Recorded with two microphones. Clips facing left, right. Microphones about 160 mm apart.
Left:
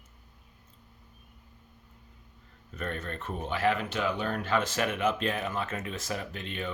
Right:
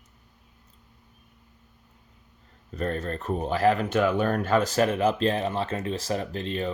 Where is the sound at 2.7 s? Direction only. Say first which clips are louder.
Right 7 dB; 35° right (ahead or behind).